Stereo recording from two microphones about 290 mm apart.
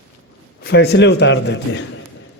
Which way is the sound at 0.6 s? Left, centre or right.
Left.